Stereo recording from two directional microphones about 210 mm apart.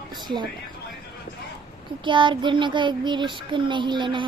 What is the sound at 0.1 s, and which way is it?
Speech, 20° right (ahead or behind).